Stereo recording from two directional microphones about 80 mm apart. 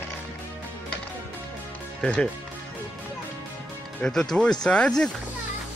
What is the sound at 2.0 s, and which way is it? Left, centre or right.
Speech, centre.